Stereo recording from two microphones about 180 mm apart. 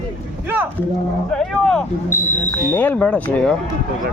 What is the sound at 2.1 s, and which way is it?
Speech, 45° left (ahead or behind).